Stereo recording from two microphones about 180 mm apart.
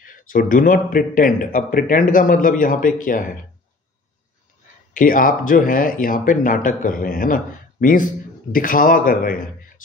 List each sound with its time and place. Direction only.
0.0 s speech: 50° left (ahead or behind)
4.9 s speech: 50° left (ahead or behind)